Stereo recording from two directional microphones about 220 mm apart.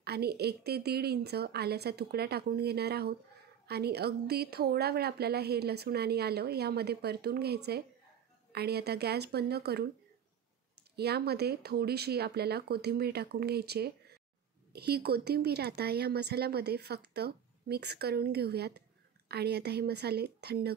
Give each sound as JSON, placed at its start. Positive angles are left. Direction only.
{"t": 0.0, "sound": "a woman's voice", "side_deg": -45}
{"t": 11.0, "sound": "a woman's voice", "side_deg": -45}